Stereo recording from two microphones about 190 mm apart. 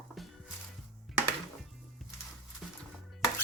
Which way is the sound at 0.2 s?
Centre (ahead or behind).